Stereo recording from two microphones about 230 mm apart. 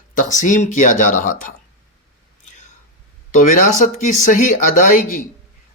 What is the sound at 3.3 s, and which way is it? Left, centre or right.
Speech, left.